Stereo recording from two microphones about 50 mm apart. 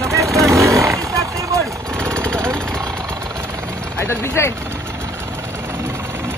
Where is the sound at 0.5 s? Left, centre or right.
Right.